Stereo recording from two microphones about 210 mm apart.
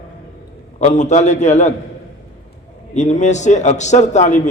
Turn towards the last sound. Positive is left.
turn(degrees=35)  # may be behind; listen again after turning